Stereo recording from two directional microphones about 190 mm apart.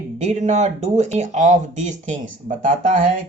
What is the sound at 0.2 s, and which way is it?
Speech, 35° right (ahead or behind).